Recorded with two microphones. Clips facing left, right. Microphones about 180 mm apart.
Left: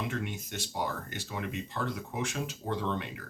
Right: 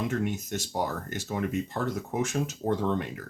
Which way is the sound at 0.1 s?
45° right (ahead or behind).